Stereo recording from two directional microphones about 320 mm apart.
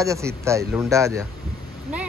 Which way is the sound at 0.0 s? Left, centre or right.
Centre.